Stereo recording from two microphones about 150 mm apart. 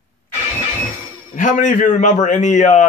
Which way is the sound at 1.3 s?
60° left (ahead or behind).